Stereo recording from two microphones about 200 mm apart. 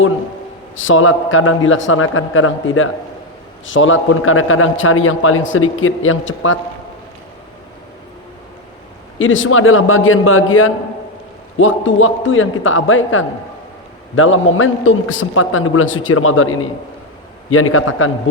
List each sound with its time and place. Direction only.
0.8 s a man's voice: 85° left
9.1 s a man's voice: 80° left
14.2 s a man's voice: 90° left